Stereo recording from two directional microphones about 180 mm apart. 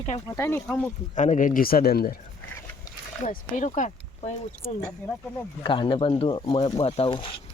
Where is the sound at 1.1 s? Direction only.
40° left (ahead or behind); by 2.1 s 60° left (ahead or behind).